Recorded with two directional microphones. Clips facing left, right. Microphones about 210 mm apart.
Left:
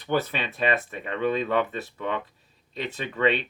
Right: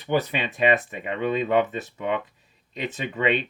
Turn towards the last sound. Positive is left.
turn(degrees=-15)  # may be behind; listen again after turning